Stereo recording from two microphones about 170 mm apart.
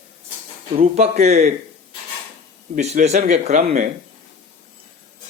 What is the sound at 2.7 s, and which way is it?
Speech, 45° right (ahead or behind).